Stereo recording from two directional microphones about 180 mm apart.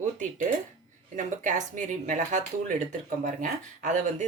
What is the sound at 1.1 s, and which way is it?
Speech, 45° right (ahead or behind).